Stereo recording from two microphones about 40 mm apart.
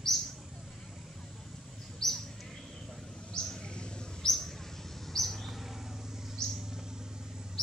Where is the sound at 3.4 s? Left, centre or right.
Left.